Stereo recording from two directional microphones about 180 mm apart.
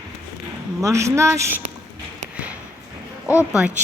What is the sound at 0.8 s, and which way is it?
Speech, 15° right (ahead or behind).